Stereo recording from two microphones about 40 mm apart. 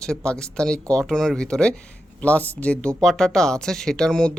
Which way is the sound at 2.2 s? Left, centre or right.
Left.